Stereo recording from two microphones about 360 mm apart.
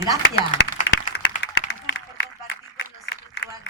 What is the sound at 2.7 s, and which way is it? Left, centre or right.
Run, left.